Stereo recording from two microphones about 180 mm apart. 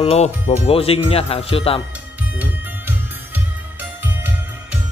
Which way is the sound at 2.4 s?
10° right (ahead or behind).